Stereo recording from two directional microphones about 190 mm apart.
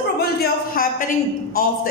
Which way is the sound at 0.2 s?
50° left (ahead or behind).